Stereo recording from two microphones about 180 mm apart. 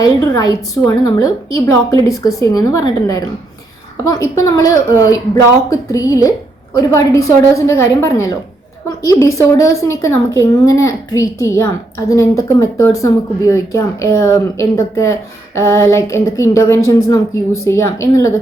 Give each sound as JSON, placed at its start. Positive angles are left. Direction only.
{"t": 0.0, "sound": "a woman's voice", "side_deg": 20}